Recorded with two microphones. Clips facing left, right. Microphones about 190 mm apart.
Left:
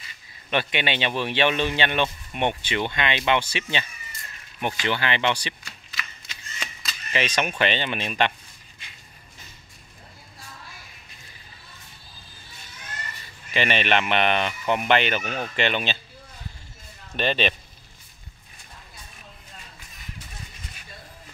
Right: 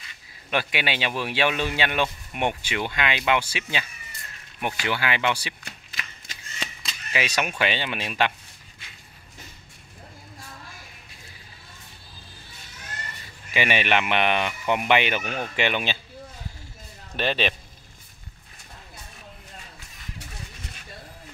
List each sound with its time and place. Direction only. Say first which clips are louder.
0.5 s speech: left 1 dB; 5° right (ahead or behind)
5.7 s shuffling cards: even; 50° right (ahead or behind)
6.6 s a sound: right 1 dB; 25° right (ahead or behind)
7.1 s speech: left 1 dB; 10° right (ahead or behind)
13.5 s speech: even; 10° right (ahead or behind)
17.2 s speech: left 1 dB; 5° right (ahead or behind)